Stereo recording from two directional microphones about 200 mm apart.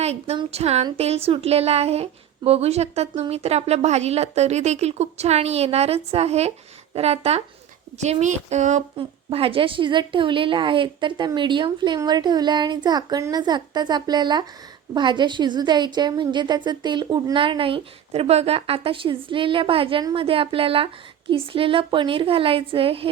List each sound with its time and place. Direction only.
0.0 s a woman's voice: 30° right (ahead or behind)